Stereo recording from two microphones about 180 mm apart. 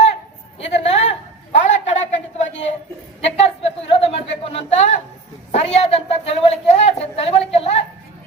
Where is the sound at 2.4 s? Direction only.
40° left (ahead or behind).